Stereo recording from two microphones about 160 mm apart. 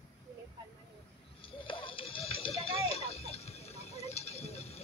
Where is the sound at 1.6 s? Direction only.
35° left (ahead or behind).